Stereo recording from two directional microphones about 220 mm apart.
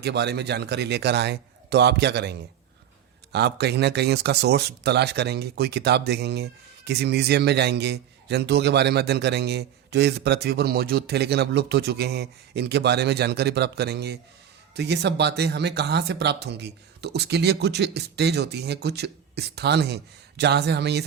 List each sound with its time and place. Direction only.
0.0 s speech: 50° right (ahead or behind)